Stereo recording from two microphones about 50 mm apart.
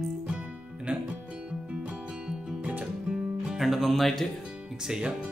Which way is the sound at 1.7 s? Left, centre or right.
Centre.